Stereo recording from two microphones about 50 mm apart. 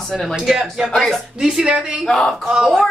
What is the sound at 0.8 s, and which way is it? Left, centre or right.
Speech, centre.